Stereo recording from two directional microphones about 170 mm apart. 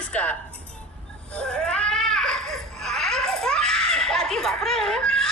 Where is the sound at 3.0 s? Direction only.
5° left (ahead or behind).